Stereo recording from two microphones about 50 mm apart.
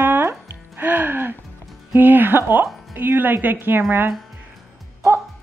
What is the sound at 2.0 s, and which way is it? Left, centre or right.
Speech, right.